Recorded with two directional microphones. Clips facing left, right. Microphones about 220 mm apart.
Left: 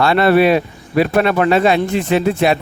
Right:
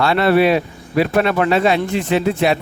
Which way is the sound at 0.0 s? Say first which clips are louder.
Left 2 dB; 50° left (ahead or behind).